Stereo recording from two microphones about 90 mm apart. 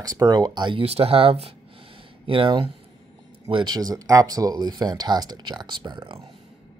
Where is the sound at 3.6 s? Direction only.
45° right (ahead or behind); by 6.1 s 60° right (ahead or behind).